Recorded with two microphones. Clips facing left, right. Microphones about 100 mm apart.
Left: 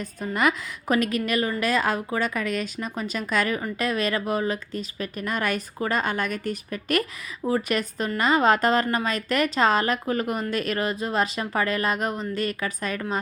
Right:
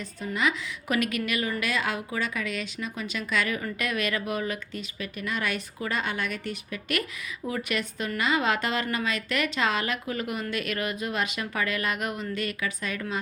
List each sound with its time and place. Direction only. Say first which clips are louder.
0.2 s a woman's voice: left 4 dB; 45° left (ahead or behind)